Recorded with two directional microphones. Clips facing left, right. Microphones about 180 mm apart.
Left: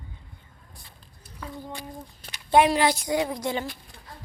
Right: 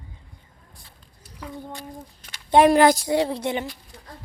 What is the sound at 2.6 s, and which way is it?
Speech, 50° right (ahead or behind).